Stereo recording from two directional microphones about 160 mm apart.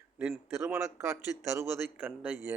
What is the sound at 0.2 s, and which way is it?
Speech, 5° right (ahead or behind).